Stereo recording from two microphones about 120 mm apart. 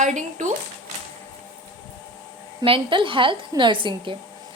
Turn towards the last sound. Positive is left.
turn(degrees=-45)  # may be behind; listen again after turning